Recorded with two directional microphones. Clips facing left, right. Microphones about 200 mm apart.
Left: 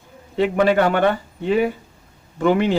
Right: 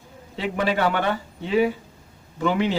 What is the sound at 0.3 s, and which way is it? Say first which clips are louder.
Speech: left 7 dB; 55° left (ahead or behind).